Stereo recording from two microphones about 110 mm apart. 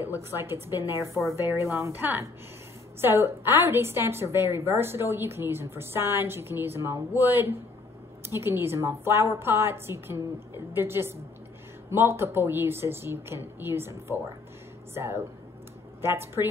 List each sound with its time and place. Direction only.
0.0 s a woman's voice: 20° right (ahead or behind)